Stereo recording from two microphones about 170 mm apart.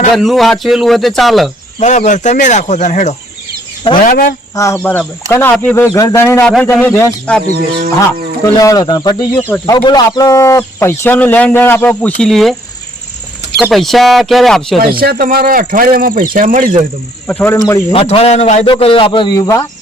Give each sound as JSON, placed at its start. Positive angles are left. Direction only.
{"t": 0.1, "sound": "speech", "side_deg": 0}
{"t": 1.8, "sound": "speech", "side_deg": 45}
{"t": 4.5, "sound": "a man's voice", "side_deg": 15}
{"t": 8.6, "sound": "speech", "side_deg": 20}
{"t": 9.4, "sound": "a man's voice", "side_deg": 10}
{"t": 9.7, "sound": "a man's voice", "side_deg": 25}
{"t": 13.6, "sound": "speech", "side_deg": 0}
{"t": 14.8, "sound": "speech", "side_deg": -60}
{"t": 17.2, "sound": "a man's voice", "side_deg": 10}
{"t": 17.9, "sound": "a man's voice", "side_deg": 35}
{"t": 19.4, "sound": "a man's voice", "side_deg": 15}